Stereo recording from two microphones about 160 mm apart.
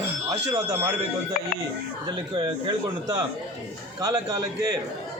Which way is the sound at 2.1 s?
30° right (ahead or behind).